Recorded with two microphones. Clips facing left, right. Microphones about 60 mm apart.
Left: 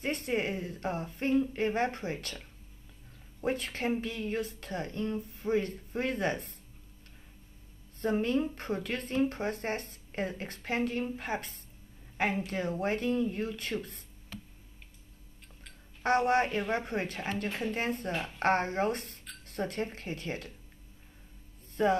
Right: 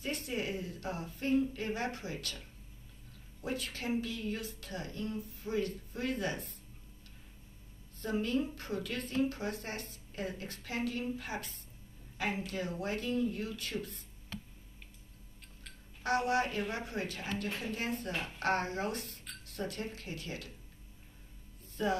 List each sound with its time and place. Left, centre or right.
0.0 s a woman's voice: left
8.0 s a woman's voice: left
16.0 s a woman's voice: left
21.8 s speech: left